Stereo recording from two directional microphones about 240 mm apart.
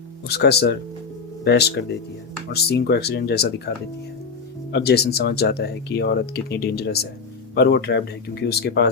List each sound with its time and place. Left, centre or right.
0.3 s speech: left
4.7 s speech: left